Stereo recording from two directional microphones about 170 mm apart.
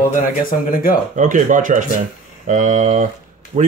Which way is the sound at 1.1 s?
50° right (ahead or behind).